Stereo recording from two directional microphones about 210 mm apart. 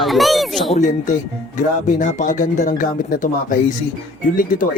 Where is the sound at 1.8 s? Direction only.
35° left (ahead or behind).